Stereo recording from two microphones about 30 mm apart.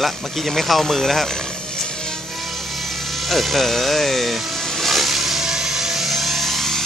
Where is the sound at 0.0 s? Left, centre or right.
Centre.